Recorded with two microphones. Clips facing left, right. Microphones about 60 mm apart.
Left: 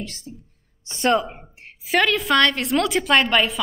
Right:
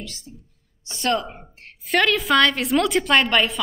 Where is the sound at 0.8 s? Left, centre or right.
Left.